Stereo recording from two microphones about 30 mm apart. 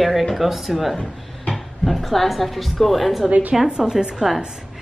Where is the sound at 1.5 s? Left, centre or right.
Centre.